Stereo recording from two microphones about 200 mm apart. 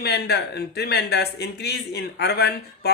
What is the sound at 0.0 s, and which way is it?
Speech, 55° left (ahead or behind).